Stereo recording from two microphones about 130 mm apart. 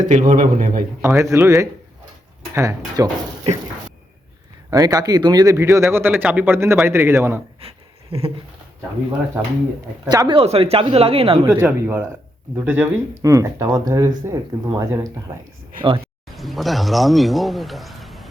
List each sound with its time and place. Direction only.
0.0 s speech: 75° right (ahead or behind)
1.0 s speech: 25° right (ahead or behind)
4.7 s speech: 30° right (ahead or behind)
7.6 s a sound: 45° right (ahead or behind)
10.1 s speech: 30° right (ahead or behind)
10.3 s speech: 50° right (ahead or behind)
11.4 s speech: 20° right (ahead or behind)
15.7 s speech: 90° right
16.3 s speech: centre (ahead or behind)